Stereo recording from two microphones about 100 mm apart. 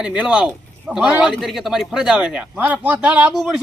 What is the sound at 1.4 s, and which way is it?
Speech, centre (ahead or behind).